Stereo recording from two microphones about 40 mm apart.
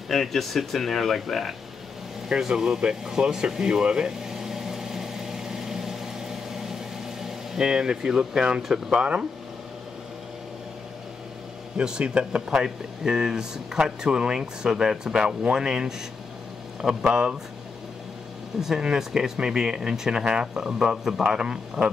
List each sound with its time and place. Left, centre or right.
0.1 s speech: centre
2.2 s a sound: centre
8.6 s speech: centre
8.9 s speech: right
12.0 s speech: right
17.1 s speech: right
18.5 s speech: centre